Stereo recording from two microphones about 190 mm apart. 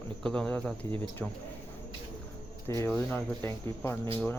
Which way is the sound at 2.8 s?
10° left (ahead or behind).